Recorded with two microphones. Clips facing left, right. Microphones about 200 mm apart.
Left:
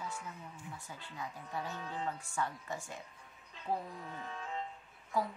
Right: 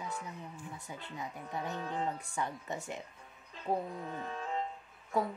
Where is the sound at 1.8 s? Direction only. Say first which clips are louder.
Right 4 dB; 50° right (ahead or behind).